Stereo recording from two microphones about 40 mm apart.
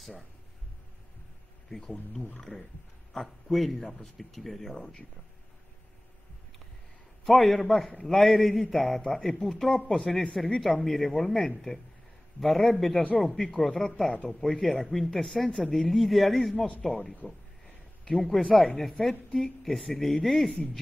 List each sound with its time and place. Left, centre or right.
3.1 s a man's voice: centre
4.7 s speech: centre
7.2 s a woman's voice: centre
9.8 s speech: centre
10.3 s a woman's voice: centre